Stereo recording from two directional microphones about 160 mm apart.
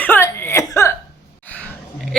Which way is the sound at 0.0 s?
15° left (ahead or behind).